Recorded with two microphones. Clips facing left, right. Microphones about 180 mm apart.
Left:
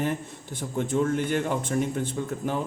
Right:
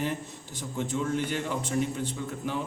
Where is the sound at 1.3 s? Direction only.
50° left (ahead or behind).